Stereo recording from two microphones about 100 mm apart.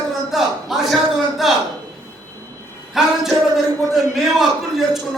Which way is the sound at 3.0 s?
5° right (ahead or behind).